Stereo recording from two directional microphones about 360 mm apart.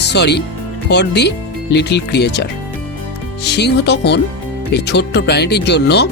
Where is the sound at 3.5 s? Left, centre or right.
Left.